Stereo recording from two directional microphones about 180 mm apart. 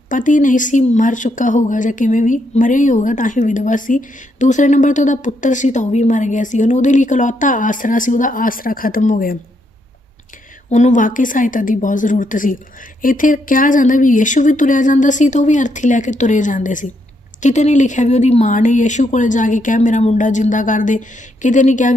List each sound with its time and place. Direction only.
0.1 s speech: 45° left (ahead or behind)
10.7 s speech: 40° left (ahead or behind)